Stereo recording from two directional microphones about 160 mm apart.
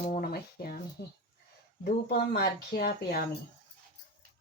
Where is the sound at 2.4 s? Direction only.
85° left.